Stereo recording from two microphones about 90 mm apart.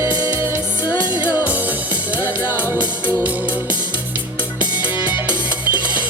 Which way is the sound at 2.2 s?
30° right (ahead or behind).